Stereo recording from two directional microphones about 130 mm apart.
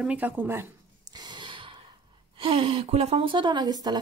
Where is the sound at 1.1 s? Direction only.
35° right (ahead or behind).